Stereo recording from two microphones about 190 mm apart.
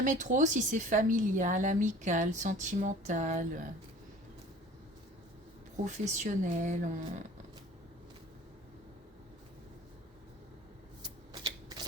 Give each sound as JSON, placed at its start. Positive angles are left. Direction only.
{"t": 0.0, "sound": "a woman's voice", "side_deg": -40}
{"t": 5.8, "sound": "a woman's voice", "side_deg": -40}